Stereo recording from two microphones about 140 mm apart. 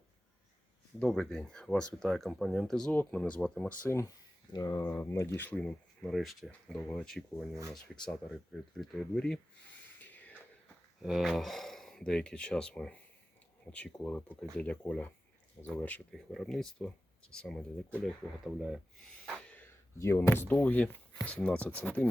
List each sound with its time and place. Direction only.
0.9 s speech: 5° left (ahead or behind)
3.8 s speech: 20° left (ahead or behind); by 7.3 s 5° left (ahead or behind)
8.7 s speech: 5° left (ahead or behind)
9.8 s rub: 10° left (ahead or behind)
11.0 s speech: centre (ahead or behind)